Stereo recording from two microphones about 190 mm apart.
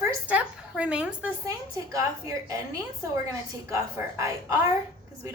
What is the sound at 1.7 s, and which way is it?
Speech, 15° right (ahead or behind).